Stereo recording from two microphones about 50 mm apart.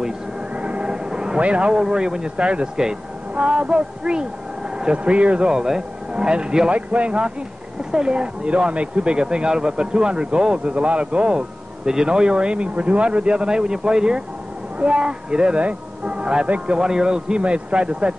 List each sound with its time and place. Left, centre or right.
0.6 s a man's voice: right